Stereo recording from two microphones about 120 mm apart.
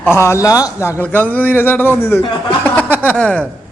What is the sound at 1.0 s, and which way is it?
A man's voice, 15° left (ahead or behind).